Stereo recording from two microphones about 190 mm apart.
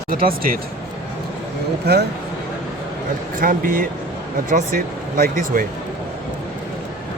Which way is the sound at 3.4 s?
50° right (ahead or behind).